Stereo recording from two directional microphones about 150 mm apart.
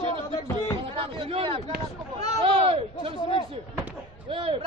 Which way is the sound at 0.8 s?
35° right (ahead or behind).